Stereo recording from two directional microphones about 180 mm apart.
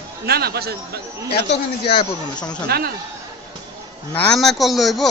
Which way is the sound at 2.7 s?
60° right (ahead or behind).